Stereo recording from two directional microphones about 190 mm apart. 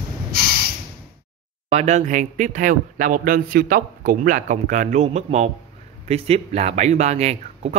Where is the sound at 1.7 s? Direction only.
35° right (ahead or behind).